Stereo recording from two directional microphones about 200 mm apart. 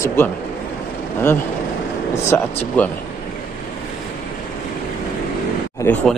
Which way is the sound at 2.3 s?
10° left (ahead or behind).